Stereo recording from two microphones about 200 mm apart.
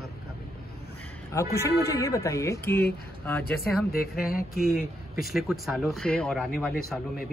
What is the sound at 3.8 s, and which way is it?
Speech, 50° left (ahead or behind).